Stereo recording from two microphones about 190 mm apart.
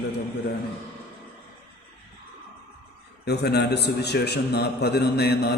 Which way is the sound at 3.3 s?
60° left (ahead or behind).